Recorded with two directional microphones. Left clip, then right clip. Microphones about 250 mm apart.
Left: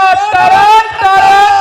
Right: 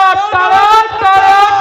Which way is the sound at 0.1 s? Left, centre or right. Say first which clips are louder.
Left 2 dB; left.